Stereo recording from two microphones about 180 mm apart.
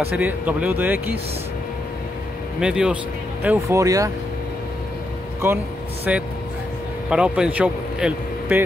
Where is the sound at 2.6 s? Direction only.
5° right (ahead or behind).